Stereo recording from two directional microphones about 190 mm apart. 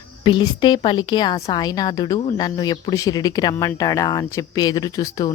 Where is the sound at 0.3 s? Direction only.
25° left (ahead or behind).